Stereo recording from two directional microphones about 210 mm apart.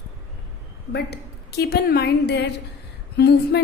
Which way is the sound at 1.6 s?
50° left (ahead or behind).